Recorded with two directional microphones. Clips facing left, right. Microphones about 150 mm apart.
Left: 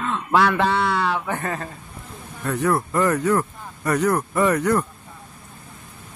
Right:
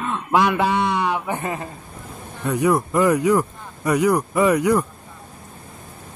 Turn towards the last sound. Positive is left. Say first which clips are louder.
# right 2 dB
turn(degrees=-10)  # may be behind; listen again after turning